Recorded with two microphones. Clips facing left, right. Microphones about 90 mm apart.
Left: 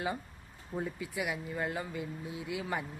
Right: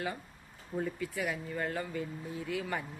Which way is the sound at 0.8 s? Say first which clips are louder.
Right 2 dB; 15° left (ahead or behind).